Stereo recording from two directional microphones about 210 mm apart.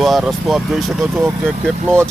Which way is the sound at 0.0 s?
Centre (ahead or behind).